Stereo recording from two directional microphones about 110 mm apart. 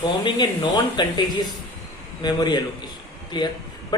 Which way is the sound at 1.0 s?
40° left (ahead or behind).